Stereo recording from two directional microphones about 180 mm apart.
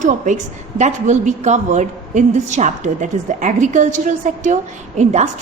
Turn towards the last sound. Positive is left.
turn(degrees=-40)  # may be behind; listen again after turning